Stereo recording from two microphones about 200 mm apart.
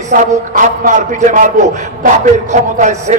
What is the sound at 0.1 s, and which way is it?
A man's voice, 40° right (ahead or behind).